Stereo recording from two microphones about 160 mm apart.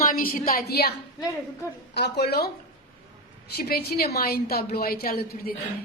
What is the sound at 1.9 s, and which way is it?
Speech, 85° left.